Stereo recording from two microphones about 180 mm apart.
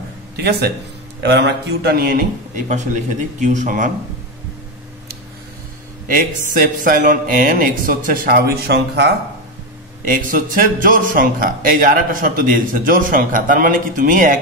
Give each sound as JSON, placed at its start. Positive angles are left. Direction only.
{"t": 0.4, "sound": "a man's voice", "side_deg": -65}
{"t": 2.5, "sound": "a man's voice", "side_deg": -40}
{"t": 6.0, "sound": "a man's voice", "side_deg": -50}
{"t": 10.0, "sound": "a man's voice", "side_deg": -50}